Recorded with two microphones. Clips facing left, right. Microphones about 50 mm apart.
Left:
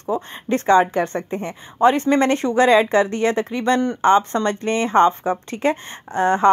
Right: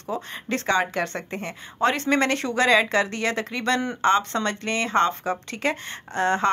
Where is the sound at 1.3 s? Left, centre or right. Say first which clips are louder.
Left 5 dB; right.